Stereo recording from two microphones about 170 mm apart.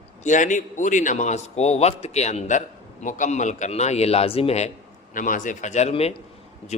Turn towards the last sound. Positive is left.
turn(degrees=40)  # may be behind; listen again after turning